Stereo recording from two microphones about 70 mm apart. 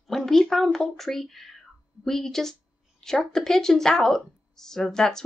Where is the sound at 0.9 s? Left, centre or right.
Centre.